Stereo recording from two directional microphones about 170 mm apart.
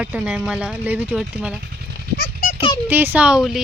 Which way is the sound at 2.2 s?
55° left (ahead or behind).